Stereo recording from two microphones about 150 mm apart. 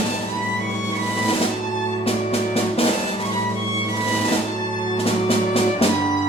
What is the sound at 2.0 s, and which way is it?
Music, 40° left (ahead or behind).